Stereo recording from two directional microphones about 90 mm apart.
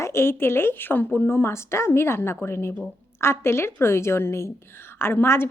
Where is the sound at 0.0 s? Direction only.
30° left (ahead or behind).